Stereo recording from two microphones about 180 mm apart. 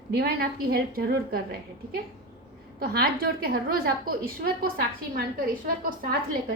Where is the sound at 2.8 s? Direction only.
55° right (ahead or behind).